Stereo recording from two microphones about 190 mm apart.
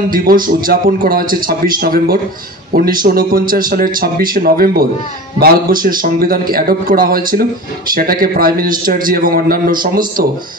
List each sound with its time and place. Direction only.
0.1 s a man's voice: 50° right (ahead or behind)